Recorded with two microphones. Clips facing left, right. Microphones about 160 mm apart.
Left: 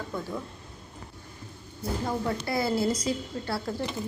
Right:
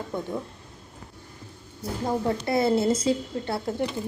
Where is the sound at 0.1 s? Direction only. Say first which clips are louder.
Right 5 dB; 20° right (ahead or behind).